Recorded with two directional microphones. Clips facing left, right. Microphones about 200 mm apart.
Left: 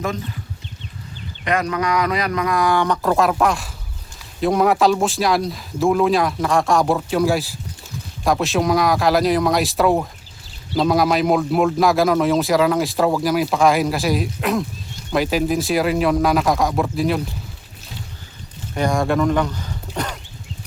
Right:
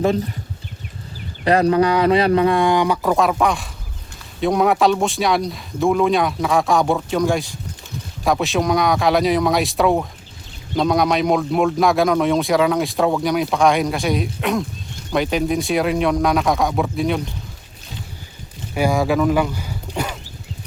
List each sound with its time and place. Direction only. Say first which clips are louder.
0.0 s speech: right 7 dB; 30° right (ahead or behind)
1.5 s speech: right 6 dB; 30° right (ahead or behind)
2.7 s a man's voice: right 1 dB; 10° right (ahead or behind)
18.7 s speech: right 1 dB; 5° right (ahead or behind)